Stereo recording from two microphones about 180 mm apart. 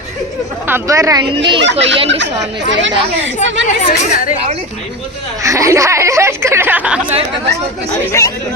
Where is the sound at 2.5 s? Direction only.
85° right.